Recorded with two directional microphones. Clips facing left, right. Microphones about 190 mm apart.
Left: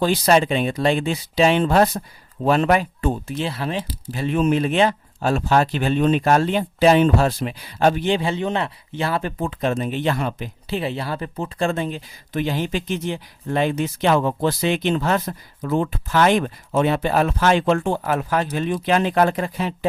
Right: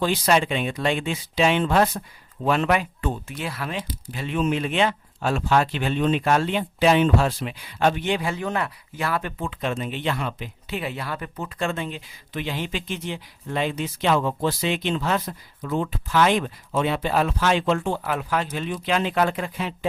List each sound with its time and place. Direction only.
0.0 s speech: 40° left (ahead or behind)